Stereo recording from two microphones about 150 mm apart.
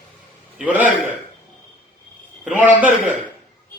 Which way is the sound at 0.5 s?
10° right (ahead or behind).